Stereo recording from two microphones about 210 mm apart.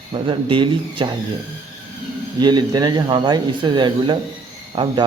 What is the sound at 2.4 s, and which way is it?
A man's voice, 20° right (ahead or behind).